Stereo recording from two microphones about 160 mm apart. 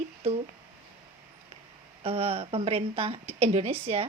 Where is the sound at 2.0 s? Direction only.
40° right (ahead or behind).